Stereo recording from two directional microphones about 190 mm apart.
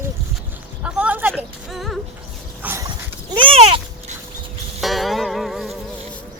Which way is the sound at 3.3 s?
30° right (ahead or behind).